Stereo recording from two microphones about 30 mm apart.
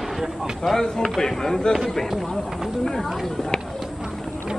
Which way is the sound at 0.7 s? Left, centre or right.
Centre.